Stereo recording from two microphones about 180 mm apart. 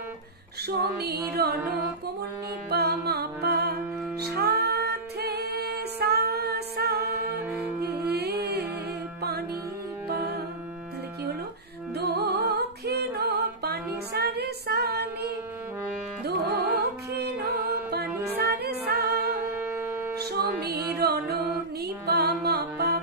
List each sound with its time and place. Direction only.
0.7 s music: 65° right (ahead or behind)
2.7 s music: 60° right (ahead or behind)
10.0 s music: 60° right (ahead or behind)
11.9 s music: 65° right (ahead or behind)
16.5 s music: 65° right (ahead or behind)
19.6 s wind instrument: 10° right (ahead or behind)
20.2 s music: 65° right (ahead or behind)